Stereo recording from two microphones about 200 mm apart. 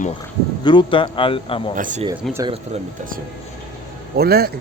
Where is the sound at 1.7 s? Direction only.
40° right (ahead or behind).